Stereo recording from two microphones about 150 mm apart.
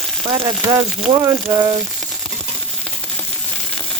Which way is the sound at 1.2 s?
25° right (ahead or behind).